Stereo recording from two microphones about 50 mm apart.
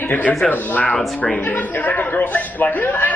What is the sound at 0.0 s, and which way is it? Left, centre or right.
A man's voice, left.